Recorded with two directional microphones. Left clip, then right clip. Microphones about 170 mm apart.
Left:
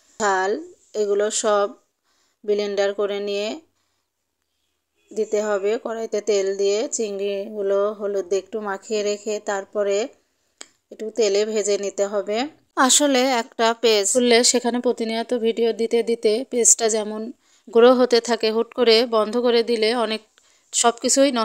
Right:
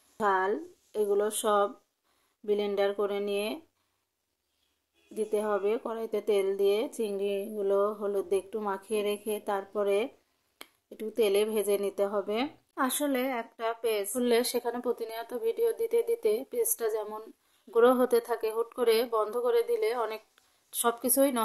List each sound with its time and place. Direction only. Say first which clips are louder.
0.2 s speech: left 7 dB; 30° left (ahead or behind)
5.1 s speech: left 8 dB; 30° left (ahead or behind)
12.7 s a woman's voice: left 13 dB; 55° left (ahead or behind); by 21.4 s 40° left (ahead or behind)